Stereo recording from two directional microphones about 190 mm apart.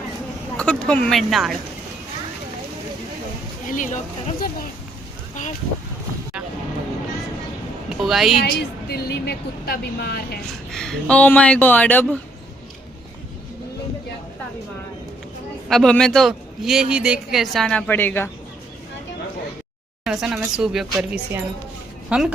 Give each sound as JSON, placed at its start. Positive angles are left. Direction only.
{"t": 0.5, "sound": "a man's voice", "side_deg": 5}
{"t": 3.7, "sound": "speech", "side_deg": 40}
{"t": 8.0, "sound": "a man's voice", "side_deg": 0}
{"t": 8.4, "sound": "a woman's voice", "side_deg": 55}
{"t": 10.7, "sound": "speech", "side_deg": 5}
{"t": 15.7, "sound": "a man's voice", "side_deg": 5}
{"t": 20.1, "sound": "a man's voice", "side_deg": -5}